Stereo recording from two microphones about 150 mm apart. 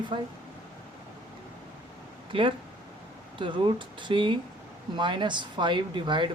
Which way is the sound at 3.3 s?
35° right (ahead or behind).